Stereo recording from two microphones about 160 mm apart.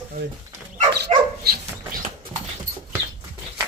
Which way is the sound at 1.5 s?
60° right (ahead or behind).